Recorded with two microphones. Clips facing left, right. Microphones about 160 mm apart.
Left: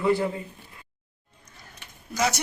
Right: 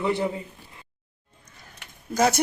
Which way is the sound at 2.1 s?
50° right (ahead or behind).